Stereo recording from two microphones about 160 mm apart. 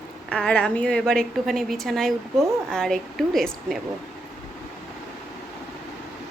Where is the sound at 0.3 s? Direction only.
5° left (ahead or behind).